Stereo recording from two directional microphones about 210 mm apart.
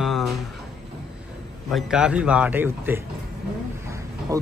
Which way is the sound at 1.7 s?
5° right (ahead or behind).